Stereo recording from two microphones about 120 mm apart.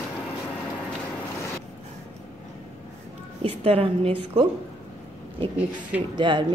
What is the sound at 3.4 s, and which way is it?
Speech, 55° right (ahead or behind).